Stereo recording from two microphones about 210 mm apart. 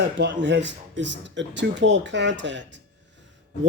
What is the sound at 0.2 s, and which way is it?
Speech, 55° right (ahead or behind).